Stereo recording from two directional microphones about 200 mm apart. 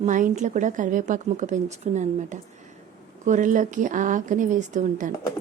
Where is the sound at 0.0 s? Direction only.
40° right (ahead or behind).